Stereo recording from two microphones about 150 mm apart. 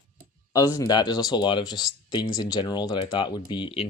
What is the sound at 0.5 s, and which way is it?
Speech, 25° left (ahead or behind).